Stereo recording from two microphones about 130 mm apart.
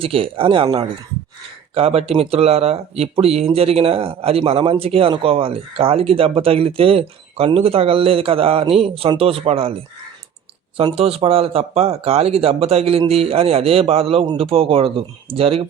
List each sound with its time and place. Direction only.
0.0 s speech: 45° right (ahead or behind)